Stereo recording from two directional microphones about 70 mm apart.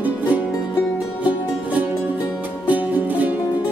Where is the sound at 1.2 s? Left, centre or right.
Right.